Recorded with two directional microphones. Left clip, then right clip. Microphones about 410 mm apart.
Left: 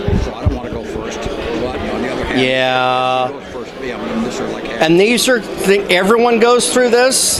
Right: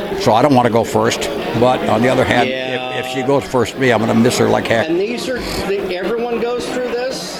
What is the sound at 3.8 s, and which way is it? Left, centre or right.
Speech, right.